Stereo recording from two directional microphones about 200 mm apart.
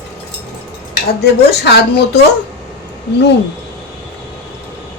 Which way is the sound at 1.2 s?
55° left (ahead or behind).